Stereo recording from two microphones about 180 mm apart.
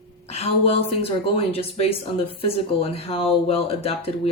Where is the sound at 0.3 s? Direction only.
35° left (ahead or behind).